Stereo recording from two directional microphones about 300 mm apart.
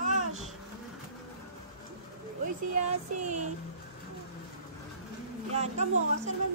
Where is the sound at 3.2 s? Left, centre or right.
Right.